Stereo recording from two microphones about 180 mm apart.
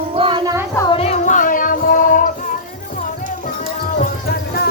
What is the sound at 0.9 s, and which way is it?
Child singing, 35° left (ahead or behind).